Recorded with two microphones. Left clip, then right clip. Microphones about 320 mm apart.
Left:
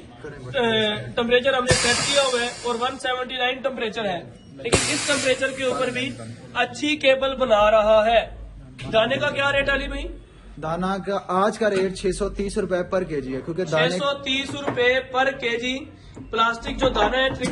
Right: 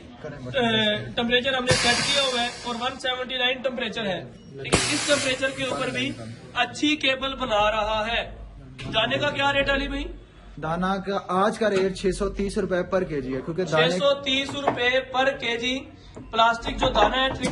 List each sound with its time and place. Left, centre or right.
0.7 s a man's voice: centre